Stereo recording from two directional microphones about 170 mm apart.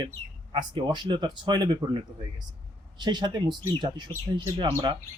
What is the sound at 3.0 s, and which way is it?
A man's voice, 25° right (ahead or behind).